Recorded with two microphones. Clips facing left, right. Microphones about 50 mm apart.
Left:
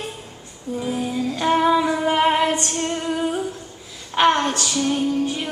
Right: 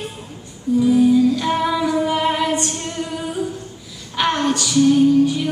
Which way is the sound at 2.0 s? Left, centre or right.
Left.